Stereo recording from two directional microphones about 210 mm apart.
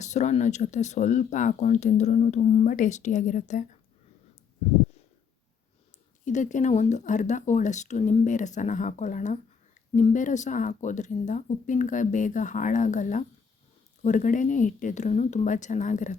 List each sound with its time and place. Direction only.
0.0 s speech: 35° left (ahead or behind)
6.2 s speech: 35° left (ahead or behind)